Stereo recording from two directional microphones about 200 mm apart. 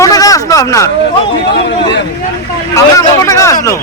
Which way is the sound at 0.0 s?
15° left (ahead or behind).